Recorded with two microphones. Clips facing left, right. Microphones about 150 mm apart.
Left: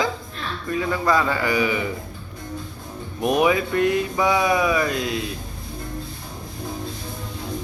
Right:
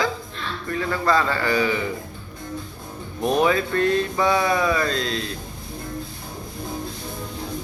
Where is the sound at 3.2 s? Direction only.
15° left (ahead or behind).